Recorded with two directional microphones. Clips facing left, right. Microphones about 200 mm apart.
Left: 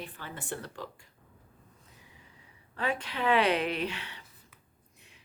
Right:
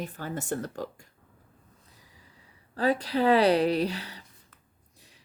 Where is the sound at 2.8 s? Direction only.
35° right (ahead or behind).